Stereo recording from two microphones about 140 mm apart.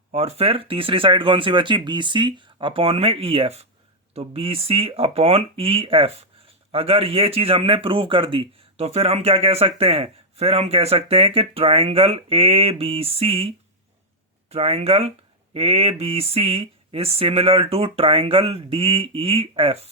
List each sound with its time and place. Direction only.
0.1 s speech: 45° right (ahead or behind)
14.5 s speech: 45° right (ahead or behind)